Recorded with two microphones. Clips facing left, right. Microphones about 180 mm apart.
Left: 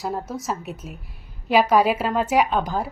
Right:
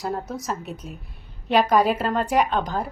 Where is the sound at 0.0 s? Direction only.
Centre (ahead or behind).